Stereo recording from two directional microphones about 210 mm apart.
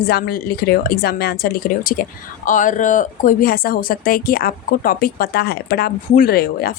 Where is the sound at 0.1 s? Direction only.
45° left (ahead or behind).